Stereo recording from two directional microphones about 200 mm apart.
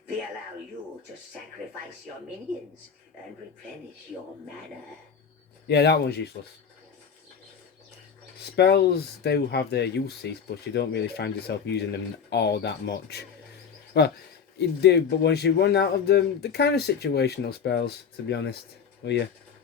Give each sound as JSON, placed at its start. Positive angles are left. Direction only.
{"t": 5.6, "sound": "speech", "side_deg": 55}
{"t": 8.4, "sound": "speech", "side_deg": 55}